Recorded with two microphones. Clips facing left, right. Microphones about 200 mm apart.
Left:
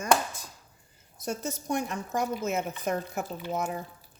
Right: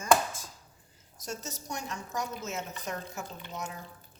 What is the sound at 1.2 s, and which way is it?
A woman's voice, 60° left (ahead or behind).